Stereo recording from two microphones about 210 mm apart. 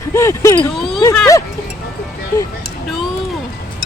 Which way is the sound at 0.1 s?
15° left (ahead or behind).